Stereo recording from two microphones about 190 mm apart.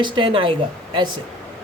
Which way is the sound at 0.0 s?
25° right (ahead or behind).